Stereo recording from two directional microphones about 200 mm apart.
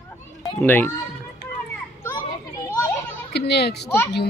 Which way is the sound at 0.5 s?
10° left (ahead or behind).